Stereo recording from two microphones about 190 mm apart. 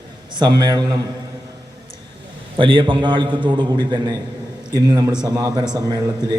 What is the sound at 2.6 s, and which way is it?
A man's voice, 25° right (ahead or behind).